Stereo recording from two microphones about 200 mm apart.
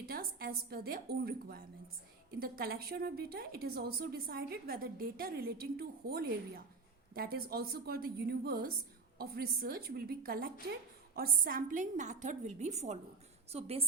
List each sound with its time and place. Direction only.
0.0 s a woman's voice: 50° right (ahead or behind); by 13.8 s 30° right (ahead or behind)